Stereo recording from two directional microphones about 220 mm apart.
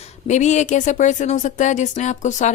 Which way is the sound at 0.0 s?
30° left (ahead or behind).